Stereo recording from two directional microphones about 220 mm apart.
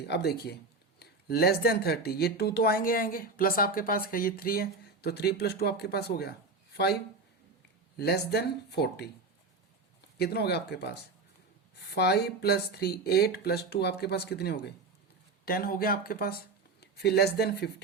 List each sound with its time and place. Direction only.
0.0 s speech: 45° left (ahead or behind)
7.9 s speech: 45° left (ahead or behind)
10.2 s speech: 45° left (ahead or behind)
11.9 s speech: 45° left (ahead or behind)